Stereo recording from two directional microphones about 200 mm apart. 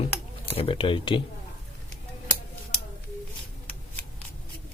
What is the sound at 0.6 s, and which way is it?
Speech, 25° left (ahead or behind).